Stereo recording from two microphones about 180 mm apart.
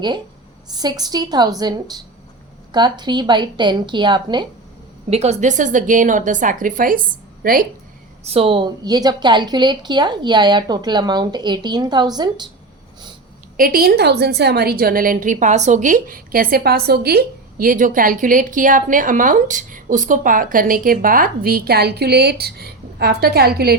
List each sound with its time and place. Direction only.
0.7 s a woman's voice: 20° right (ahead or behind)
5.0 s a woman's voice: 35° right (ahead or behind); by 7.7 s 55° right (ahead or behind)
8.3 s a woman's voice: 30° right (ahead or behind)
13.6 s a woman's voice: 55° right (ahead or behind)